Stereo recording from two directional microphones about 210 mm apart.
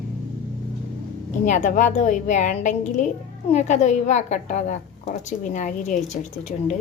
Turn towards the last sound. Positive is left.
turn(degrees=35)  # may be behind; listen again after turning